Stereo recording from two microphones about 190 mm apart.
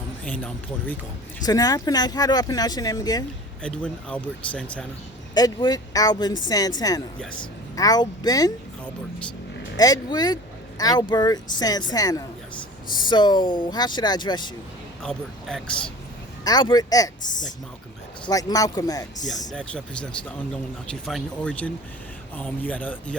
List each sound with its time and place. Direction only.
0.3 s speech: 5° left (ahead or behind)
1.5 s speech: 20° left (ahead or behind)
3.6 s speech: 5° left (ahead or behind)
5.3 s speech: 20° left (ahead or behind)
9.7 s speech: 20° left (ahead or behind)
15.0 s speech: 5° left (ahead or behind)
16.4 s speech: 20° left (ahead or behind)
18.3 s speech: 20° left (ahead or behind)
19.5 s speech: 5° left (ahead or behind)
21.1 s speech: 5° left (ahead or behind)